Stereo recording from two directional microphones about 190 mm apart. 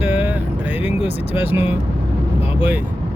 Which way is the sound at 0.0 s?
10° right (ahead or behind).